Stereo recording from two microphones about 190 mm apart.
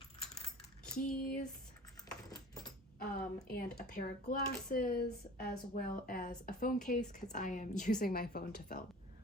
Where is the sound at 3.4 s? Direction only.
55° left (ahead or behind).